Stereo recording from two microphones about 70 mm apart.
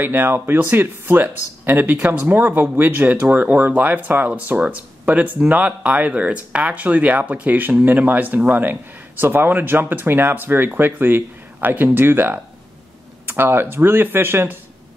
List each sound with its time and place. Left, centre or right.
0.0 s speech: right